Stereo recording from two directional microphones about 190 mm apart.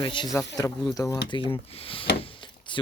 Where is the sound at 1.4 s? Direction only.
30° left (ahead or behind).